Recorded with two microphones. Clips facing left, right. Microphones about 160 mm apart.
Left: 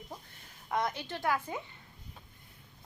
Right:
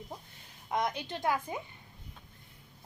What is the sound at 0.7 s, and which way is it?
Speech, 20° right (ahead or behind).